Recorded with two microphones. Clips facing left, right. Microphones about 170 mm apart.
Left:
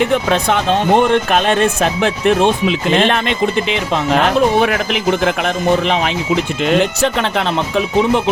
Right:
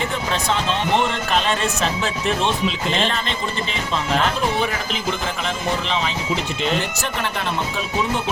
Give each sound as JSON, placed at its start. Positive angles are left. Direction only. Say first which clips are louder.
{"t": 0.0, "sound": "speech", "louder": "left 9 dB", "side_deg": 65}